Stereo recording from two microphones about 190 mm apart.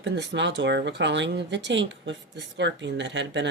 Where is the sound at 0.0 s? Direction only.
70° right (ahead or behind).